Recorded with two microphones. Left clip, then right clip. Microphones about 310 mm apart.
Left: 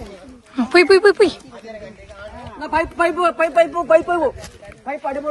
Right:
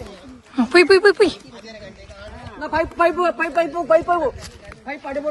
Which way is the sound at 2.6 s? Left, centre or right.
Centre.